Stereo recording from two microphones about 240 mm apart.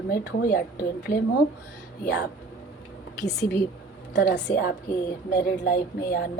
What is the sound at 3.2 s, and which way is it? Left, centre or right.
A woman's voice, left.